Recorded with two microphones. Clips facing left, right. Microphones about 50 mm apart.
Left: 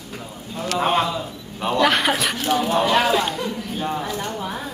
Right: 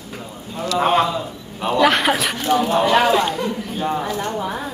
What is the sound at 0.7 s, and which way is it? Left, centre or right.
A man's voice, centre.